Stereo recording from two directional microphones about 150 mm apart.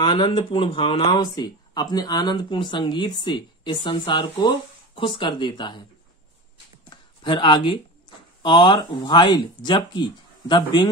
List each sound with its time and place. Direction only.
0.0 s speech: 35° left (ahead or behind)
6.9 s a sound: 30° left (ahead or behind)
8.4 s a man's voice: 30° left (ahead or behind)